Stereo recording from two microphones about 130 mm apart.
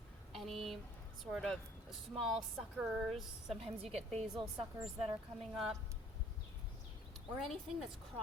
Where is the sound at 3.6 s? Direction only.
50° right (ahead or behind).